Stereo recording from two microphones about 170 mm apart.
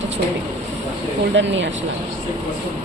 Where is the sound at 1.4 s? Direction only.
90° right.